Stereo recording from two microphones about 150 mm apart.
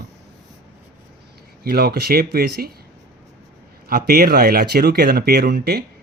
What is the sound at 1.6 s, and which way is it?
Speech, 90° right.